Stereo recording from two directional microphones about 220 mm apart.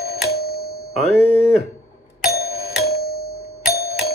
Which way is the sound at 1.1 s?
5° right (ahead or behind).